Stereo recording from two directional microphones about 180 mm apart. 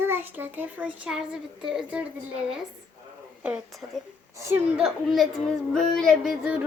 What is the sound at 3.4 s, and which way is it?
A child's voice, 5° right (ahead or behind).